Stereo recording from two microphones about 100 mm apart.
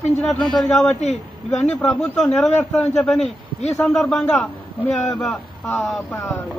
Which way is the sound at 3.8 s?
10° left (ahead or behind).